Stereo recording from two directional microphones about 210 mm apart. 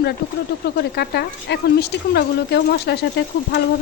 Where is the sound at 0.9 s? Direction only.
50° left (ahead or behind).